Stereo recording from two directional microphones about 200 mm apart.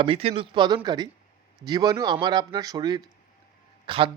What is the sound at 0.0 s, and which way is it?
A man's voice, 30° right (ahead or behind).